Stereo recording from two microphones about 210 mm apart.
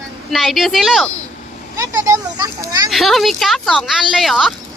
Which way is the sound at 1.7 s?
15° right (ahead or behind).